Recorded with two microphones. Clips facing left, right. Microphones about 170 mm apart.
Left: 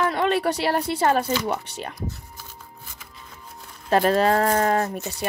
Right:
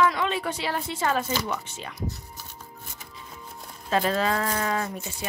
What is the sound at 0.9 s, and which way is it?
Speech, 40° left (ahead or behind).